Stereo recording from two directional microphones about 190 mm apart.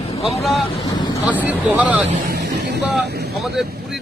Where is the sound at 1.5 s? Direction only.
10° right (ahead or behind).